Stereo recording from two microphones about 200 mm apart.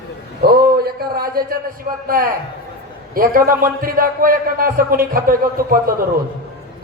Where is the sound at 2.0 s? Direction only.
45° right (ahead or behind).